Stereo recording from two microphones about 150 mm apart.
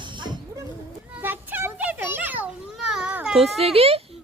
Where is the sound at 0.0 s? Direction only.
30° right (ahead or behind).